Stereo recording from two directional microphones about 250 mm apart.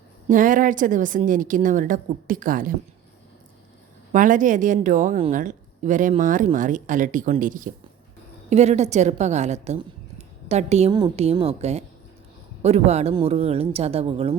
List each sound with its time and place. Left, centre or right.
0.3 s a woman's voice: right
4.1 s a woman's voice: right